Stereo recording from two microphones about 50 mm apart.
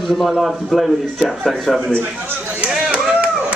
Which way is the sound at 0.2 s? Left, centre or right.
Centre.